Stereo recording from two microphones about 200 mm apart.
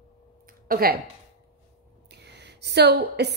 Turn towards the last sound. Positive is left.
turn(degrees=-55)  # may be behind; listen again after turning